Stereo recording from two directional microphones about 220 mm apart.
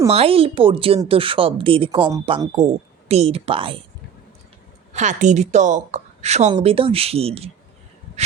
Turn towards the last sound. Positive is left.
turn(degrees=-25)  # may be behind; listen again after turning